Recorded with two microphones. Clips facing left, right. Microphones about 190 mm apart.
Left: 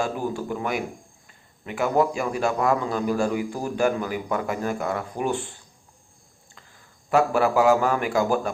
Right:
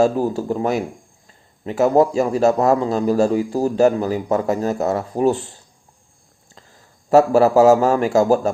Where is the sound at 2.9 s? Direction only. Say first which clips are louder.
Right 7 dB; 30° right (ahead or behind).